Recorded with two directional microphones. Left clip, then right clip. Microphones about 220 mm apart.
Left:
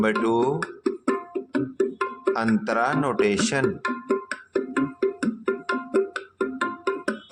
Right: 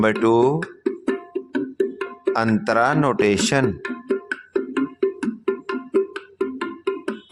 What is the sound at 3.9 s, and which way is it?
Music, 30° left (ahead or behind).